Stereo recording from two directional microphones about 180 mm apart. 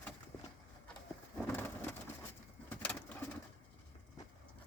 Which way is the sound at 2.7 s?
10° left (ahead or behind).